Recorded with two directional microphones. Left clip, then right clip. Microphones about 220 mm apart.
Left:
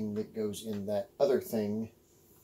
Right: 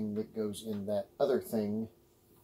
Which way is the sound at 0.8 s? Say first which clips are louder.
Left 2 dB; centre (ahead or behind).